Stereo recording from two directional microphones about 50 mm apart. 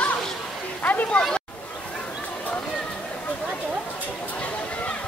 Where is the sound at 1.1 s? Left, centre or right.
Centre.